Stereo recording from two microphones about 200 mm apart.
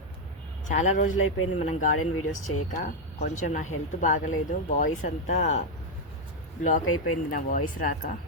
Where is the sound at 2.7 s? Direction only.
35° left (ahead or behind).